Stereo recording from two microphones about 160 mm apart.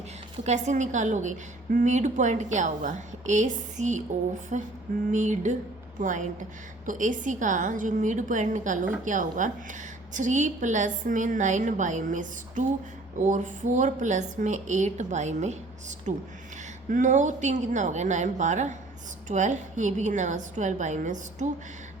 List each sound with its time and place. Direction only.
0.4 s a woman's voice: 45° right (ahead or behind)